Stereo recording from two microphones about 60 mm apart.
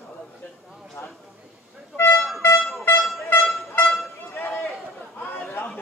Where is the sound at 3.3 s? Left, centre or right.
Left.